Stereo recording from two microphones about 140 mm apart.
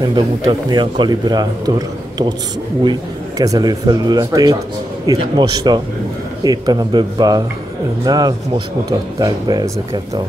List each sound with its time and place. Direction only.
0.0 s a man's voice: 35° right (ahead or behind)